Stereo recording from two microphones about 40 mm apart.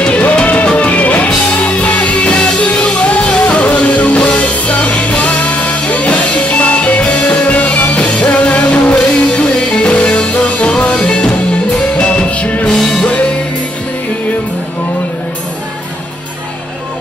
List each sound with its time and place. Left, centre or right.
0.0 s music: left
12.6 s music: centre